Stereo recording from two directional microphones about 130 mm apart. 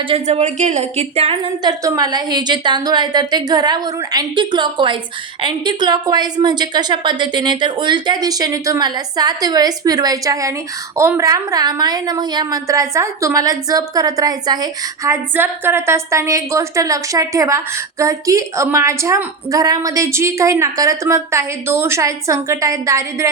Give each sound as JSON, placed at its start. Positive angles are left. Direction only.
{"t": 0.3, "sound": "a woman's voice", "side_deg": -65}
{"t": 1.6, "sound": "a woman's voice", "side_deg": -25}